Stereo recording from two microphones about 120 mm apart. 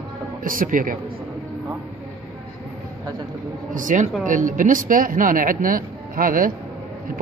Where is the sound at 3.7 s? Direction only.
90° right.